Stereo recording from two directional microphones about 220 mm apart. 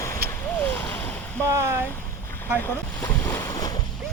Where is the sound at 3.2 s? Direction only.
10° left (ahead or behind).